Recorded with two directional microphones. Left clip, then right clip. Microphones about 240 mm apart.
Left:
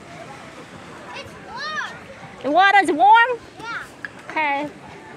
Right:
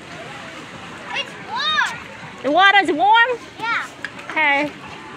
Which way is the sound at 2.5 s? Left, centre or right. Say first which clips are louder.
Right 1 dB; centre.